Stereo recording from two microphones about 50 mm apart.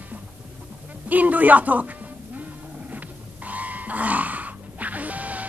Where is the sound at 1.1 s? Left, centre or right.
Right.